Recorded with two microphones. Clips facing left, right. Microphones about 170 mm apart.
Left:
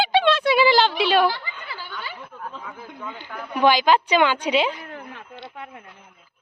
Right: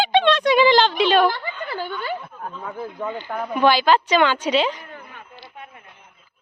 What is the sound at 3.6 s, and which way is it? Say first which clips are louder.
Speech: even; 15° left (ahead or behind).